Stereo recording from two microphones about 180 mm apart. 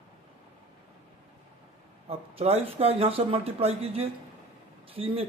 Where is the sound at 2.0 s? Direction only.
35° right (ahead or behind).